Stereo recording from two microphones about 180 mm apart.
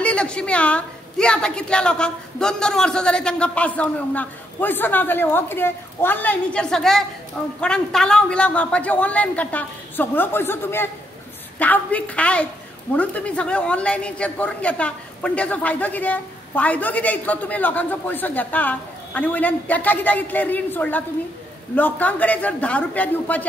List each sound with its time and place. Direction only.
0.0 s a woman's voice: 5° left (ahead or behind)